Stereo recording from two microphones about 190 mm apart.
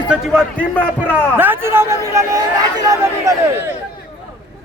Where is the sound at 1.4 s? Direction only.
10° right (ahead or behind).